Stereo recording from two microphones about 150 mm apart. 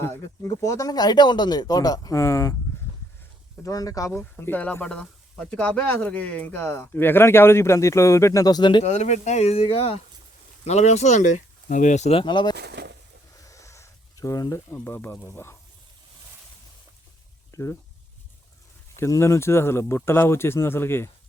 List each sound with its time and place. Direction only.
0.0 s speech: 20° left (ahead or behind)
3.6 s speech: 25° left (ahead or behind)
8.8 s speech: 50° left (ahead or behind)
12.2 s speech: 30° left (ahead or behind)
12.5 s speech: 90° right
13.3 s snake: 20° left (ahead or behind)
17.5 s speech: 20° left (ahead or behind)
18.9 s speech: 20° left (ahead or behind)